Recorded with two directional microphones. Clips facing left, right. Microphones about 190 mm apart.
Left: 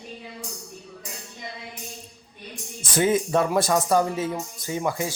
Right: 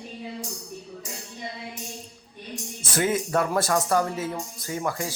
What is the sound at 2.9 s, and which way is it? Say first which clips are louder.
Speech: left 3 dB; 15° left (ahead or behind).